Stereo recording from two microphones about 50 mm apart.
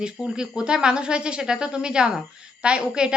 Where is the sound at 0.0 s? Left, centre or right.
Centre.